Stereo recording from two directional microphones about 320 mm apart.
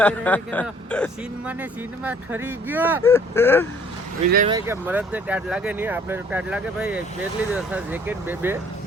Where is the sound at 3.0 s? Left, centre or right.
Centre.